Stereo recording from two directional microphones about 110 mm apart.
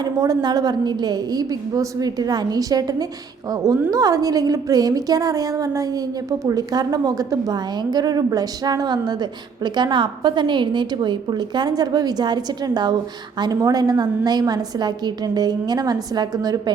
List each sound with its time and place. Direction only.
0.0 s a woman's voice: 35° right (ahead or behind)